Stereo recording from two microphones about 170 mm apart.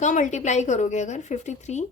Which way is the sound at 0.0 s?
45° left (ahead or behind).